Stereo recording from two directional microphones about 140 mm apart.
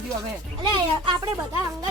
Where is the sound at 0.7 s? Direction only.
30° right (ahead or behind).